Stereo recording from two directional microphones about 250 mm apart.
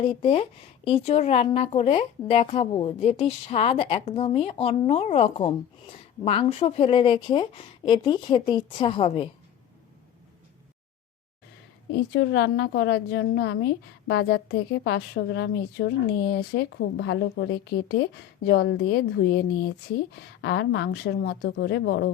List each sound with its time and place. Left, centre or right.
0.0 s speech: left
11.9 s a woman's voice: left